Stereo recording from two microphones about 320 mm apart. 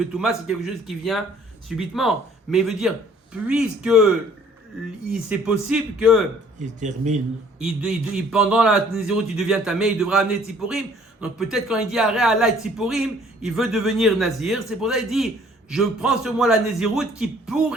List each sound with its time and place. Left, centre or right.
0.0 s a man's voice: centre
5.3 s a man's voice: centre
6.6 s speech: right
7.6 s a man's voice: centre